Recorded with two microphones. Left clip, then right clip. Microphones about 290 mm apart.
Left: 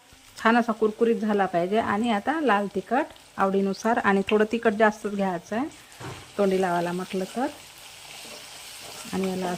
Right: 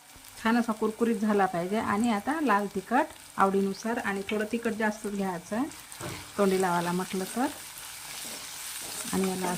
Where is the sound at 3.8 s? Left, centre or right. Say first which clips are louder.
Left 9 dB; centre.